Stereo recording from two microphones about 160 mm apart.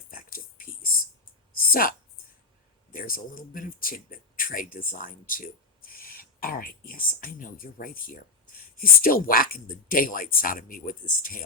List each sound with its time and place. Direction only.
0.1 s whispering: 60° left (ahead or behind)
1.7 s speech: 65° left (ahead or behind)